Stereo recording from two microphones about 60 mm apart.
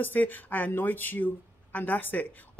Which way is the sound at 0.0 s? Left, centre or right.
Left.